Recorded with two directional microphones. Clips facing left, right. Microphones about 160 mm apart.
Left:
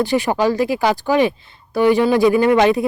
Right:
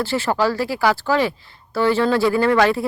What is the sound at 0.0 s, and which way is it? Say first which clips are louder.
Speech: left 3 dB; 15° left (ahead or behind).